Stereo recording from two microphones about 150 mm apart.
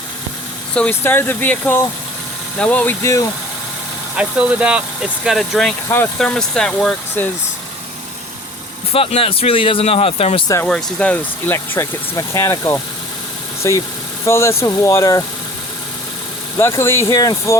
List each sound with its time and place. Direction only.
0.7 s speech: 10° left (ahead or behind)
4.1 s speech: 5° right (ahead or behind)
8.9 s speech: 40° left (ahead or behind)
10.7 s speech: 5° left (ahead or behind); by 15.2 s 20° left (ahead or behind)
16.6 s speech: 15° left (ahead or behind)